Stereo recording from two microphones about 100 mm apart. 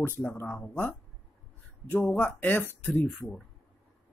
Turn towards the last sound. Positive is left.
turn(degrees=0)  # may be behind; listen again after turning